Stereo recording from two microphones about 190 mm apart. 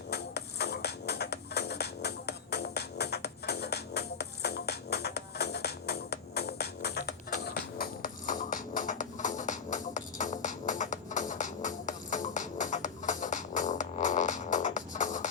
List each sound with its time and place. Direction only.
0.1 s music: 60° left (ahead or behind); by 15.3 s 40° left (ahead or behind)